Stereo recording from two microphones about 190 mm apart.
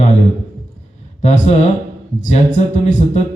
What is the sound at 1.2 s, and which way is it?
A man's voice, 35° left (ahead or behind).